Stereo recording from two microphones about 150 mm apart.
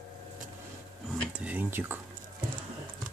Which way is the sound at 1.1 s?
5° right (ahead or behind).